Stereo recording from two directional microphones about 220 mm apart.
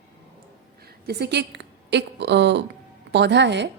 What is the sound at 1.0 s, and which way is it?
A man's voice, 50° right (ahead or behind).